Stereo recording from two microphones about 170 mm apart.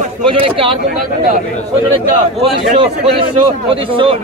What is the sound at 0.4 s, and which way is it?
Speech, 30° right (ahead or behind).